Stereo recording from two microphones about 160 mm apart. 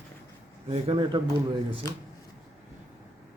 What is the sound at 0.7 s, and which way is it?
Speech, 35° right (ahead or behind).